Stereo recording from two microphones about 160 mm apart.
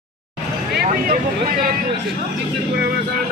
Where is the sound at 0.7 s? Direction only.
70° right (ahead or behind).